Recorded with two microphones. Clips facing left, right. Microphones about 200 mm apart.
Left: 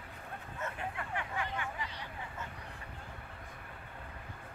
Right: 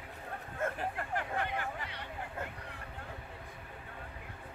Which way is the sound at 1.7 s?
60° right (ahead or behind).